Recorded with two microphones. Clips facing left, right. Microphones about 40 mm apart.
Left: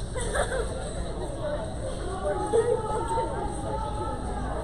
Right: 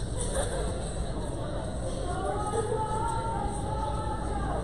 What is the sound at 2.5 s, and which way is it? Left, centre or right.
Music, left.